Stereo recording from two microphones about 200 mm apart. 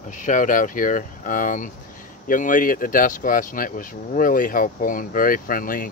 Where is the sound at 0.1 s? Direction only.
40° left (ahead or behind).